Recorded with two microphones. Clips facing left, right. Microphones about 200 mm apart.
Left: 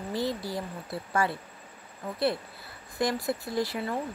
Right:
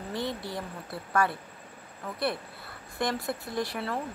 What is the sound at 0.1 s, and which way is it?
Speech, 25° right (ahead or behind).